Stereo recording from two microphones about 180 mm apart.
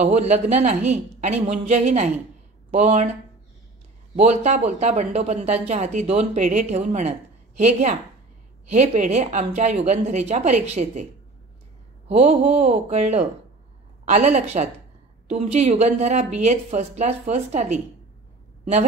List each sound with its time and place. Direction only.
0.0 s speech: 40° right (ahead or behind)
4.2 s speech: 40° right (ahead or behind)
12.1 s speech: 35° right (ahead or behind)